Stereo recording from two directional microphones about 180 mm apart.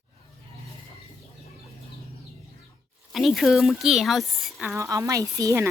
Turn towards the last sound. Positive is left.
turn(degrees=-15)  # may be behind; listen again after turning